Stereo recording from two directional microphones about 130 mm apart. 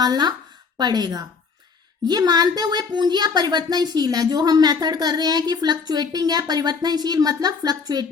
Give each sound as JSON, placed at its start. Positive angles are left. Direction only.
{"t": 0.0, "sound": "a woman's voice", "side_deg": -30}